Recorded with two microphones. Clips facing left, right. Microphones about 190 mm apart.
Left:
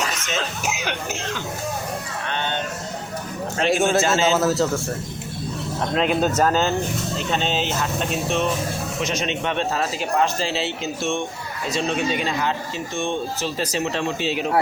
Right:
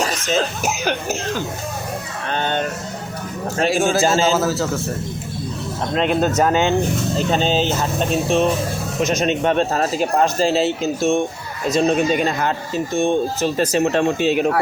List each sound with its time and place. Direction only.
0.0 s speech: 35° right (ahead or behind)
3.7 s a man's voice: centre (ahead or behind)
5.9 s a man's voice: centre (ahead or behind)
7.2 s speech: 40° right (ahead or behind)